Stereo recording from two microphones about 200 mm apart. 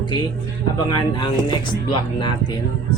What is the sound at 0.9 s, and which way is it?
Speech, 20° left (ahead or behind).